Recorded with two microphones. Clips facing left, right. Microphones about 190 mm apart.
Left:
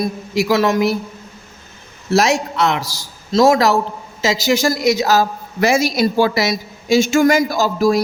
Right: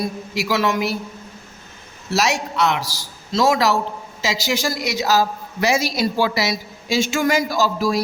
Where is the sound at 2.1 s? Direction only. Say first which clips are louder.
Left 5 dB; 50° left (ahead or behind).